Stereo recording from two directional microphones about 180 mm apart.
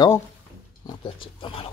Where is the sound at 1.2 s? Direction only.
30° left (ahead or behind).